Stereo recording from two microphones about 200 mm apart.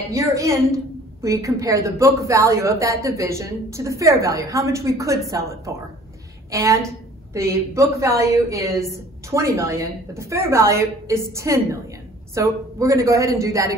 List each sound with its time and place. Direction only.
0.1 s speech: 15° right (ahead or behind)